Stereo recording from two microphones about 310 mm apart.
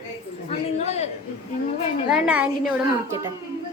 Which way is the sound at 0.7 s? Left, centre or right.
Left.